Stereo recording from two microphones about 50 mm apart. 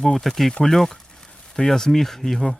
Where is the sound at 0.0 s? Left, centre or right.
Centre.